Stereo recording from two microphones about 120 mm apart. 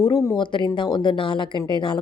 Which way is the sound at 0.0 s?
25° left (ahead or behind).